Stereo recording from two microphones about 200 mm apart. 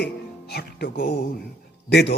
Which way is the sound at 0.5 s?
55° left (ahead or behind).